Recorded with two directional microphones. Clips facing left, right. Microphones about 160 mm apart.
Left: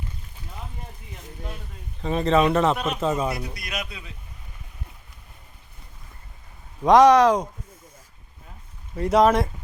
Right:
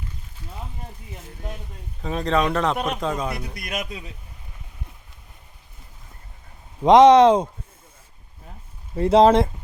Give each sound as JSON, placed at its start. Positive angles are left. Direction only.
{"t": 2.0, "sound": "a man's voice", "side_deg": 0}
{"t": 3.5, "sound": "a man's voice", "side_deg": -50}
{"t": 6.8, "sound": "speech", "side_deg": -20}
{"t": 9.0, "sound": "speech", "side_deg": -30}